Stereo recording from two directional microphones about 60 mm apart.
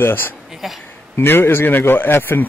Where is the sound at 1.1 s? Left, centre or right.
Left.